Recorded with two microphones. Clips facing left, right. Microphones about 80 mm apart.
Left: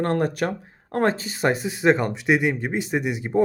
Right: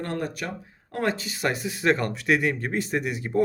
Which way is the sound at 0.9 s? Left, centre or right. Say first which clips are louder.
Left 5 dB; left.